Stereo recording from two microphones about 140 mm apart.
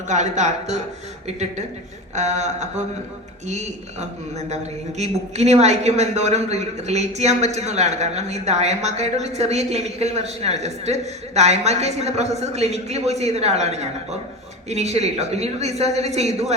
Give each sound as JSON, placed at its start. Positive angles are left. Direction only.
{"t": 0.1, "sound": "a man's voice", "side_deg": -55}
{"t": 2.1, "sound": "a man's voice", "side_deg": -55}